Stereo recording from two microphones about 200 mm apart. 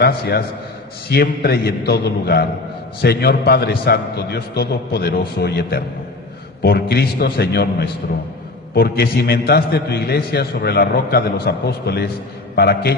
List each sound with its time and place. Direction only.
0.0 s a man's voice: 50° left (ahead or behind)